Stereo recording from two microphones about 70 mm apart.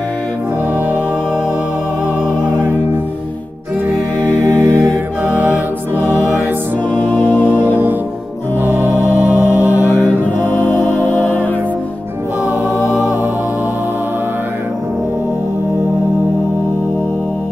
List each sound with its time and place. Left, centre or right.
4.5 s music: right
7.4 s music: right
12.7 s music: left